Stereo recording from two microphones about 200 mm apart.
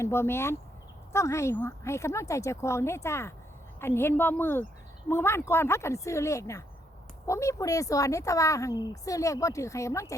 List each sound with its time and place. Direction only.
0.0 s speech: 10° left (ahead or behind)